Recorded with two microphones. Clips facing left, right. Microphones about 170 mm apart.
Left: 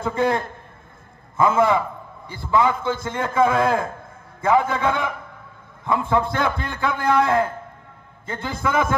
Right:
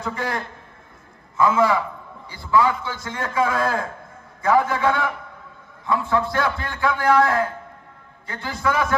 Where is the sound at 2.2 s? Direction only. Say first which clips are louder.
Left 4 dB; 50° left (ahead or behind).